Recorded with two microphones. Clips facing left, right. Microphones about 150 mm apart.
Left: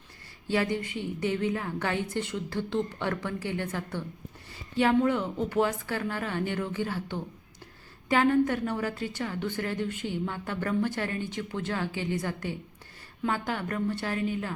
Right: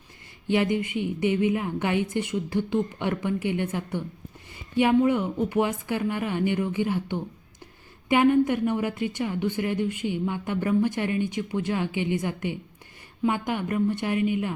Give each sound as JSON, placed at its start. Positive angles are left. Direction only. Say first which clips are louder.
{"t": 0.4, "sound": "a woman's voice", "louder": "right 4 dB", "side_deg": -20}